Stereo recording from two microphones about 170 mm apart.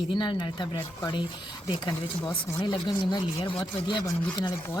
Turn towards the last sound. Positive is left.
turn(degrees=25)  # may be behind; listen again after turning